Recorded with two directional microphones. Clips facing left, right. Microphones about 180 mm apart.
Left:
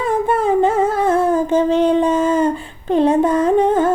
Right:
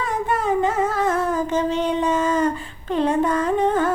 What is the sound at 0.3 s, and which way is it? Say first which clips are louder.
Humming: left 5 dB; 30° left (ahead or behind).